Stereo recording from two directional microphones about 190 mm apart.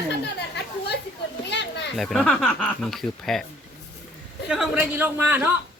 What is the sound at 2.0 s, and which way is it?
Speech, centre (ahead or behind).